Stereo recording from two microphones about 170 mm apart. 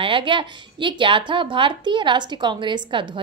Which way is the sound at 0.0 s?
30° right (ahead or behind).